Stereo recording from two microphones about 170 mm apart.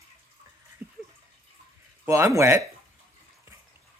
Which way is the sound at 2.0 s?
15° right (ahead or behind).